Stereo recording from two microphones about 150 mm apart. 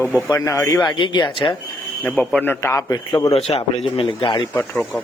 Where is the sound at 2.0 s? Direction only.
10° left (ahead or behind).